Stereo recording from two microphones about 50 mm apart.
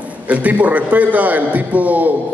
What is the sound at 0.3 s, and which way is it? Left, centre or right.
A man's voice, right.